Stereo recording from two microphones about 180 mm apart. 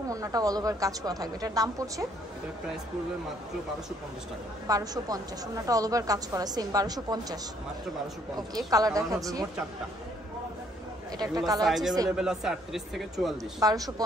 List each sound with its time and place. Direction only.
0.1 s a woman's voice: 20° right (ahead or behind)
4.6 s a woman's voice: 20° right (ahead or behind)
8.4 s a woman's voice: 20° right (ahead or behind)
11.1 s a woman's voice: 20° right (ahead or behind)
11.6 s speech: centre (ahead or behind)
13.6 s a woman's voice: 20° right (ahead or behind)